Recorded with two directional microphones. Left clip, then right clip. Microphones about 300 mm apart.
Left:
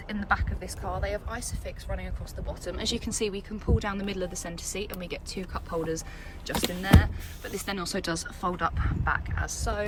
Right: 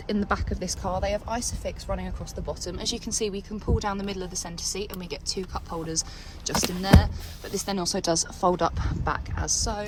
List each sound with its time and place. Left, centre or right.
0.1 s speech: right
1.0 s speech: centre